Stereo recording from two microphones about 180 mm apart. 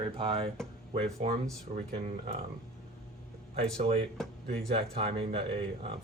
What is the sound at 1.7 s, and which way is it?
Speech, 35° right (ahead or behind).